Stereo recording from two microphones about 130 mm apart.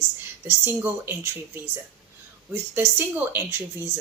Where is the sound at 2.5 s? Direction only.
15° right (ahead or behind).